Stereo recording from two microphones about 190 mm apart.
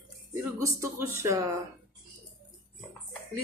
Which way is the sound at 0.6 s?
15° right (ahead or behind).